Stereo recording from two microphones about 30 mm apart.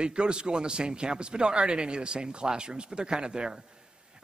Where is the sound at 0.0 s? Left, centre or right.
Right.